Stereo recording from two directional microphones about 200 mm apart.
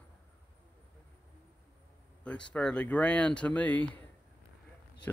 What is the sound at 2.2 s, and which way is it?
Speech, 5° left (ahead or behind).